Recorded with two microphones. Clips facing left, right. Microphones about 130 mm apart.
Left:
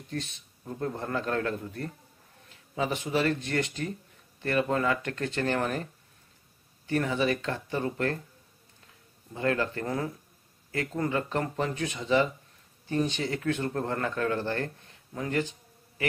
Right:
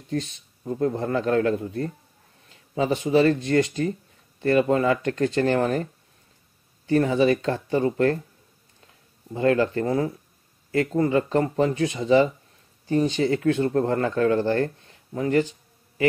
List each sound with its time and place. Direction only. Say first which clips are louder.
1.0 s speech: right 7 dB; 40° right (ahead or behind)
2.7 s speech: right 8 dB; 35° right (ahead or behind)
6.9 s speech: right 8 dB; 35° right (ahead or behind)
9.3 s speech: right 8 dB; 35° right (ahead or behind)